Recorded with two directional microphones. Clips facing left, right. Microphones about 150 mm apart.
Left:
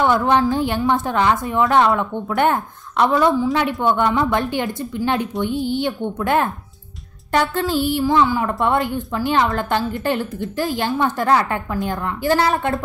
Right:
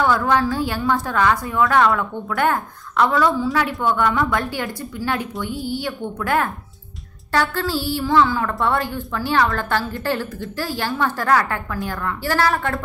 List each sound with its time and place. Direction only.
0.0 s a woman's voice: 20° left (ahead or behind)